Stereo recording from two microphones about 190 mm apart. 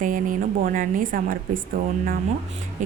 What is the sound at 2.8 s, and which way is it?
Music, 40° right (ahead or behind).